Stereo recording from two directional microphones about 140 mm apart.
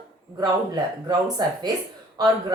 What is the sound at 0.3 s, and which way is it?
A woman's voice, 30° right (ahead or behind).